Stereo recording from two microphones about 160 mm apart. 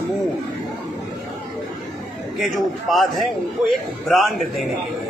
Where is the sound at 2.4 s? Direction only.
Centre (ahead or behind).